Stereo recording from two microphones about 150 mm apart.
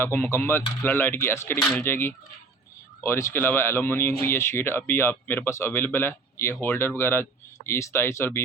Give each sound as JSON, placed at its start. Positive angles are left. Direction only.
{"t": 0.0, "sound": "speech", "side_deg": 15}